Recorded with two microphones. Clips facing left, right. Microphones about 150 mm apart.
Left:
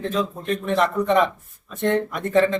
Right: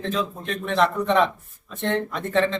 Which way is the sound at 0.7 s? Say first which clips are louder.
Left 1 dB; 10° left (ahead or behind).